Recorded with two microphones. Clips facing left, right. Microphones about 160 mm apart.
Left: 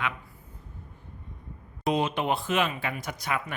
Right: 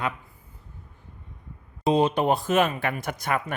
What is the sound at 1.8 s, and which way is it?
Speech, 30° right (ahead or behind).